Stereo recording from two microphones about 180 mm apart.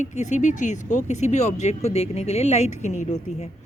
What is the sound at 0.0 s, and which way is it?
A woman's voice, 40° left (ahead or behind).